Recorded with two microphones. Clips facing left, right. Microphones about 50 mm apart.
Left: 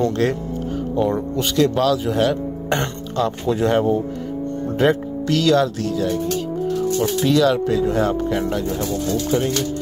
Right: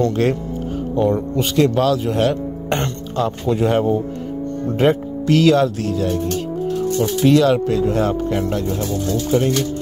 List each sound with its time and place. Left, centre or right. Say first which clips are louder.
1.6 s speech: right 1 dB; centre
4.7 s speech: right 1 dB; centre
7.2 s speech: right 3 dB; centre